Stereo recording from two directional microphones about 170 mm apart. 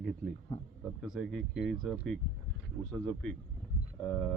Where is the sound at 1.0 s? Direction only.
Centre (ahead or behind).